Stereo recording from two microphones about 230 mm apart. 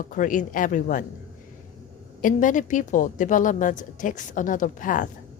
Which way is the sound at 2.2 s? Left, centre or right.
Left.